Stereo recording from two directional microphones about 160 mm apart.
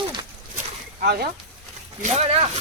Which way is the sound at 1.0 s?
75° right (ahead or behind).